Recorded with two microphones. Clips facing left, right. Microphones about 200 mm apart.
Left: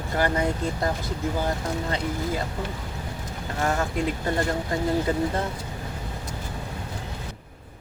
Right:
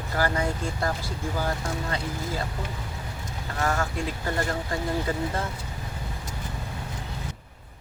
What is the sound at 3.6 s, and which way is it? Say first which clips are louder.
Speech: left 2 dB; 20° left (ahead or behind).